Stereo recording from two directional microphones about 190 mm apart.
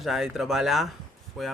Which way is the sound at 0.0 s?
Centre (ahead or behind).